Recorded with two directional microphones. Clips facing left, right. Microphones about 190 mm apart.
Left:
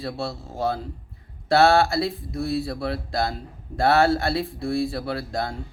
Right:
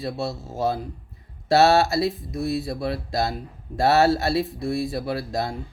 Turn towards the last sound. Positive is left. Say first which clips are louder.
# right 1 dB
turn(degrees=-20)  # may be behind; listen again after turning